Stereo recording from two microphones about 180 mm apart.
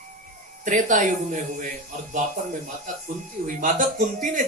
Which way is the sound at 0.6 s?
45° right (ahead or behind).